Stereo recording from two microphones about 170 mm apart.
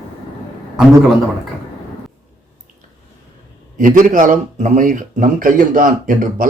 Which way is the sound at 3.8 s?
50° right (ahead or behind).